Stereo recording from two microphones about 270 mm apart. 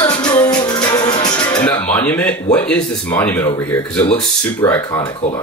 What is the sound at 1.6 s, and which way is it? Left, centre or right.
Speech, centre.